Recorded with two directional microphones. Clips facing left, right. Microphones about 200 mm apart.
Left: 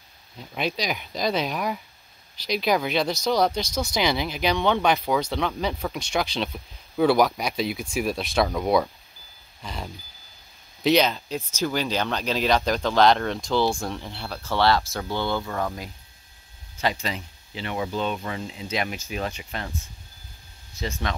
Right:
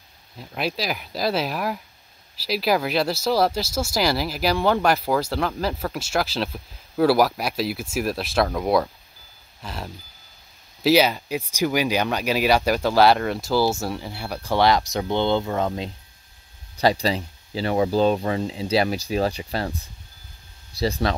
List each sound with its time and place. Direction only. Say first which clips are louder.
0.4 s speech: right 1 dB; 5° right (ahead or behind); by 15.9 s 20° right (ahead or behind)
16.7 s speech: right 7 dB; 35° right (ahead or behind)
20.7 s speech: right 7 dB; 35° right (ahead or behind)